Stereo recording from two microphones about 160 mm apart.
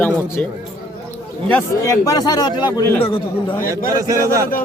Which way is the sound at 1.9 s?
25° left (ahead or behind).